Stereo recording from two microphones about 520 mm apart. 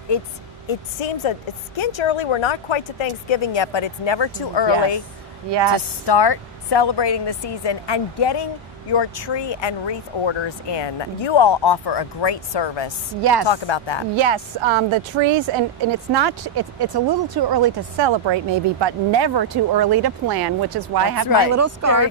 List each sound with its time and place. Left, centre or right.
0.7 s speech: left
13.2 s speech: right
13.5 s speech: left
14.1 s a woman's voice: right
16.1 s speech: right
21.5 s speech: right